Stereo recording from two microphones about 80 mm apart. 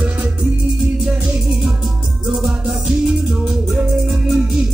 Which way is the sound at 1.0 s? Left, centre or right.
Centre.